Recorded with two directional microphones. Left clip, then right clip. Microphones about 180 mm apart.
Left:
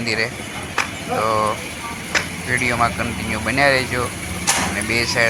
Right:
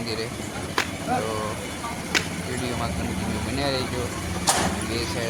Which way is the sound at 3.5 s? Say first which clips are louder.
Left 12 dB; 15° left (ahead or behind).